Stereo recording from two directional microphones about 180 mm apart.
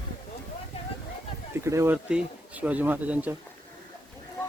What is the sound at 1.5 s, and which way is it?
Speech, 15° right (ahead or behind).